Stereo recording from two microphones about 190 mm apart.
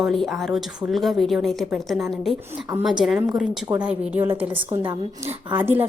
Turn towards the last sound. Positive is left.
turn(degrees=-10)  # may be behind; listen again after turning